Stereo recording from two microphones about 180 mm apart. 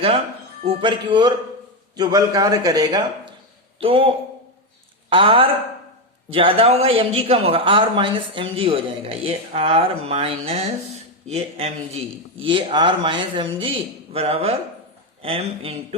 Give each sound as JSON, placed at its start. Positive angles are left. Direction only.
{"t": 0.6, "sound": "a woman's voice", "side_deg": -30}